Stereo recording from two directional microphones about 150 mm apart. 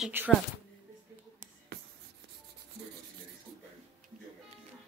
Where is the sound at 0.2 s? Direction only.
15° right (ahead or behind).